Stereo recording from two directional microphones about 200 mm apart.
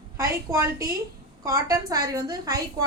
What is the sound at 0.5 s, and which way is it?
A woman's voice, 15° right (ahead or behind).